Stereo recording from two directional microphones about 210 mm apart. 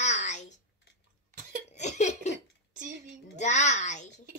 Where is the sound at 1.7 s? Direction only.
35° left (ahead or behind).